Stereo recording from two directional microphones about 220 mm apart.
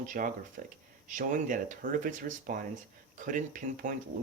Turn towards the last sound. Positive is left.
turn(degrees=-35)  # may be behind; listen again after turning